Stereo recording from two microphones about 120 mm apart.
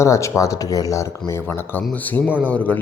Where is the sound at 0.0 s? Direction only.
25° left (ahead or behind).